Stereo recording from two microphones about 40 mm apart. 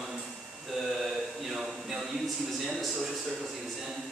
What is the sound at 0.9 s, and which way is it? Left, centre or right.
Speech, centre.